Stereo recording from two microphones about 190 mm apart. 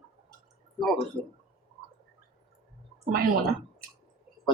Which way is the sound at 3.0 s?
55° right (ahead or behind).